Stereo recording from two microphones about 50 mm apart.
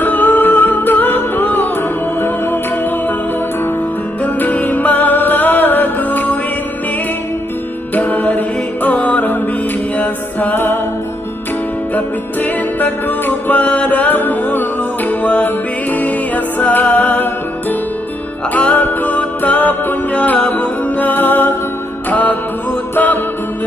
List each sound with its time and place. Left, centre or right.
0.0 s music: left
4.2 s music: left
7.9 s music: left
11.9 s music: left